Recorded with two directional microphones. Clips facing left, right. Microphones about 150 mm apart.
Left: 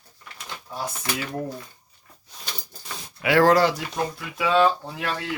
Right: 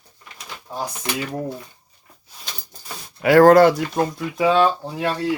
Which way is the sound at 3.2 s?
45° right (ahead or behind).